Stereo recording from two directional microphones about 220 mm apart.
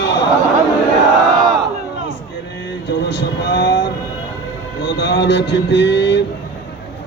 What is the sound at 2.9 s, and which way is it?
Speech, 50° left (ahead or behind).